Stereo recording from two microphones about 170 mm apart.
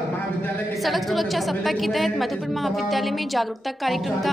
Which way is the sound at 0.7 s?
Centre (ahead or behind).